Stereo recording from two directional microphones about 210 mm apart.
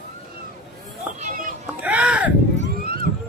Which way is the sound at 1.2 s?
40° right (ahead or behind).